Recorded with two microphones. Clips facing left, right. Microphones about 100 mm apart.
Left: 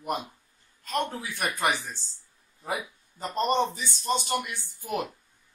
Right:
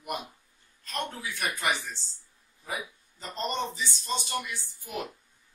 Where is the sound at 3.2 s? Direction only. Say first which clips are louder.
Left 7 dB; 50° left (ahead or behind).